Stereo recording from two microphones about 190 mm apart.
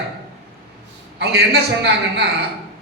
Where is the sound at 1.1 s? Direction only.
60° right (ahead or behind).